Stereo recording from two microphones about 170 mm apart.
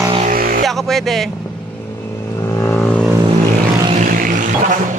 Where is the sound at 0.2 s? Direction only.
55° right (ahead or behind).